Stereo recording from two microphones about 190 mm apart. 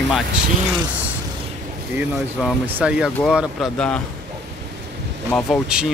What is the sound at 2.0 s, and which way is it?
Speech, 5° right (ahead or behind).